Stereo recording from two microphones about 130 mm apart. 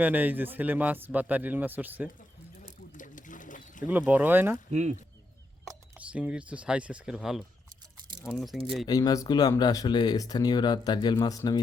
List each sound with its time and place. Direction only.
0.0 s speech: 15° right (ahead or behind)
2.9 s pigeon: 80° left
3.8 s speech: 15° right (ahead or behind)
4.7 s speech: 60° right (ahead or behind)
6.1 s speech: 10° right (ahead or behind)
8.9 s speech: 30° left (ahead or behind)